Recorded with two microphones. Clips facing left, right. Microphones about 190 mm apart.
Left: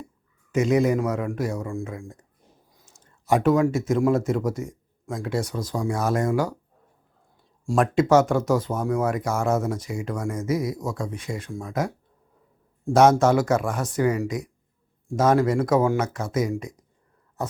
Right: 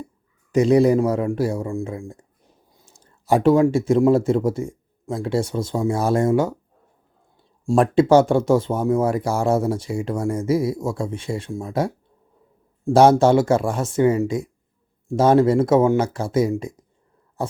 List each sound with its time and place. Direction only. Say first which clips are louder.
0.5 s a man's voice: right 5 dB; 35° right (ahead or behind)
7.6 s speech: right 5 dB; 25° right (ahead or behind)